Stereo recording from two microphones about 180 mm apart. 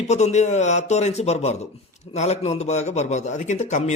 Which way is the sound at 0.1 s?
40° left (ahead or behind).